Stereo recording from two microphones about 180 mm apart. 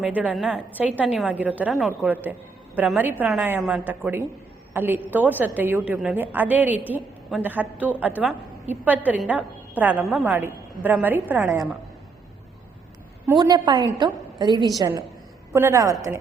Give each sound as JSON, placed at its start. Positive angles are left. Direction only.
{"t": 0.0, "sound": "a woman's voice", "side_deg": -10}
{"t": 13.3, "sound": "a woman's voice", "side_deg": -25}